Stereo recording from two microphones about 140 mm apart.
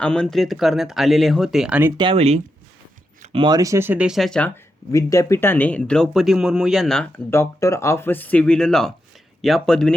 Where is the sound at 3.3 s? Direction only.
35° right (ahead or behind); by 4.5 s 5° left (ahead or behind).